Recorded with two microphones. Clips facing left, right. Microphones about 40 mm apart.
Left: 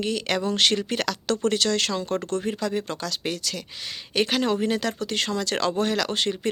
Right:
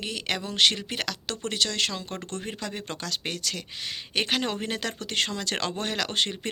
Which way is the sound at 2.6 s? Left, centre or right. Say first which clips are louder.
Left 7 dB; right.